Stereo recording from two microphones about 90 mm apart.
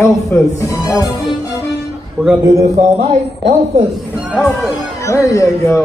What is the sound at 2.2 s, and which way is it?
Speech, 5° right (ahead or behind).